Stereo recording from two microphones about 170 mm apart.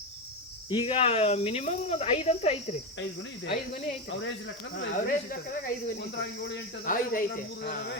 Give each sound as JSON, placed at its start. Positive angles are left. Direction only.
{"t": 0.7, "sound": "speech", "side_deg": 30}
{"t": 4.1, "sound": "speech", "side_deg": 90}
{"t": 4.8, "sound": "speech", "side_deg": 60}
{"t": 6.1, "sound": "speech", "side_deg": 90}
{"t": 6.8, "sound": "speech", "side_deg": 55}
{"t": 7.6, "sound": "speech", "side_deg": 70}